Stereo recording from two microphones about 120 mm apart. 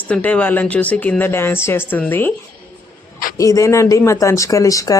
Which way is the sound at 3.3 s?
30° left (ahead or behind).